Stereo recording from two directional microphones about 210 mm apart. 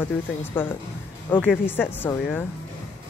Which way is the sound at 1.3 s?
5° left (ahead or behind).